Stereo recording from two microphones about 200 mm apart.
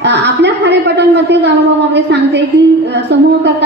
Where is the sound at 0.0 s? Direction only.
60° right (ahead or behind).